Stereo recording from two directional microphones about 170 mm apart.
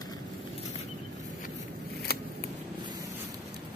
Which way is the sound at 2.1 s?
65° left (ahead or behind).